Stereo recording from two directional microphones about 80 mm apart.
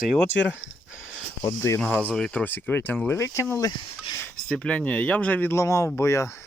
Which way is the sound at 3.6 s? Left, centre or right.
Left.